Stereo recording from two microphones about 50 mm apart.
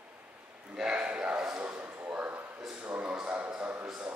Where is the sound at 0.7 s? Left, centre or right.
Centre.